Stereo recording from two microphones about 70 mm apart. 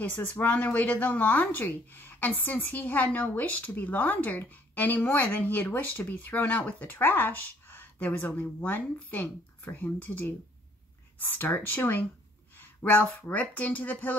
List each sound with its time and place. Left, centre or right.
0.0 s speech: left